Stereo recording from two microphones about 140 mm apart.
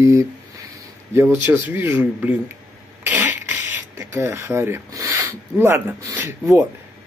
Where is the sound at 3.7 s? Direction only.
20° right (ahead or behind).